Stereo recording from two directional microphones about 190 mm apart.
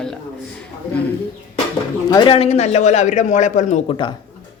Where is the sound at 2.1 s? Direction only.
25° left (ahead or behind).